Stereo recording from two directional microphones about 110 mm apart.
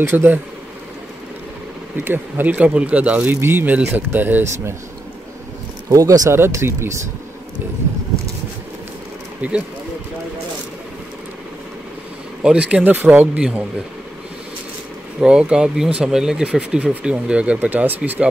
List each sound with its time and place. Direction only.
0.0 s speech: 20° right (ahead or behind)
2.0 s speech: 15° right (ahead or behind)
5.9 s speech: 30° right (ahead or behind)
9.4 s speech: 15° right (ahead or behind)
12.4 s speech: 10° right (ahead or behind)
15.1 s speech: 10° right (ahead or behind)